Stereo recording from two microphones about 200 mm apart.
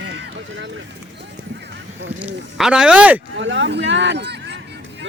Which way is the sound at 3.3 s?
65° right (ahead or behind).